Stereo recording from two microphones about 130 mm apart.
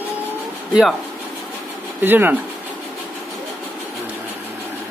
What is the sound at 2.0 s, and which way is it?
Speech, 15° right (ahead or behind).